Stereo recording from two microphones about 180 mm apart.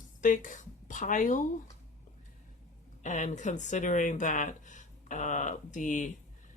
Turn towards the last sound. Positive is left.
turn(degrees=45)  # may be behind; listen again after turning